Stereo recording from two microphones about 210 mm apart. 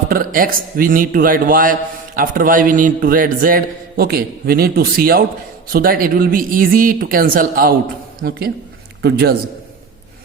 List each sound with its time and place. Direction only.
0.1 s a man's voice: 40° right (ahead or behind)